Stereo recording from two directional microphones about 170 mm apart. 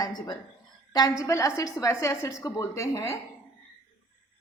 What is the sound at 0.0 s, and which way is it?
A woman's voice, 25° left (ahead or behind).